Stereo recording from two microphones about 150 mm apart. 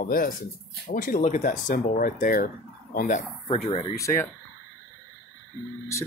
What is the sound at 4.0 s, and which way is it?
Speech, 20° left (ahead or behind).